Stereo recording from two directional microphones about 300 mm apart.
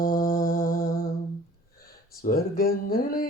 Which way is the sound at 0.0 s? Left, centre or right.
Left.